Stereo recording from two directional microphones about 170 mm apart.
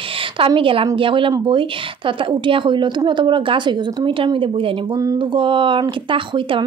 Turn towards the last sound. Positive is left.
turn(degrees=-30)  # may be behind; listen again after turning